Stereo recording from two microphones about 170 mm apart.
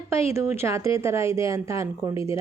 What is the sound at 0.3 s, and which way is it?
A woman's voice, 15° right (ahead or behind).